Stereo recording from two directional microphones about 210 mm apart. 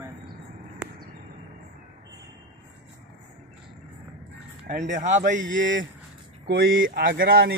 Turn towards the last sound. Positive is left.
turn(degrees=-45)  # may be behind; listen again after turning